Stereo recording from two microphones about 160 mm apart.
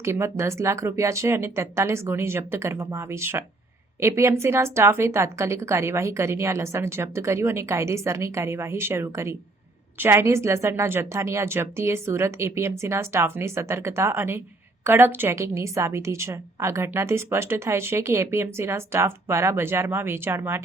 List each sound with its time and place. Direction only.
0.0 s a woman's voice: 15° right (ahead or behind)